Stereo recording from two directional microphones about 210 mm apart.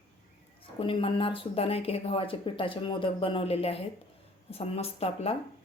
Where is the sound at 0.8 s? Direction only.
25° left (ahead or behind).